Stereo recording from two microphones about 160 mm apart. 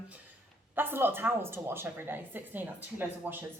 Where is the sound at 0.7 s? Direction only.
15° right (ahead or behind).